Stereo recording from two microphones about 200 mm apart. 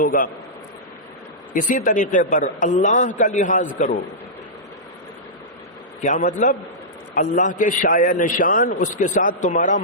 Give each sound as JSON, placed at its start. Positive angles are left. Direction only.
{"t": 0.0, "sound": "a man's voice", "side_deg": 40}
{"t": 1.5, "sound": "a man's voice", "side_deg": 40}
{"t": 6.0, "sound": "a man's voice", "side_deg": 35}